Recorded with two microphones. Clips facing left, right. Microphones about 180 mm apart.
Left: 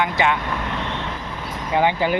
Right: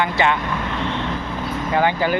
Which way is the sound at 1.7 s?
20° left (ahead or behind).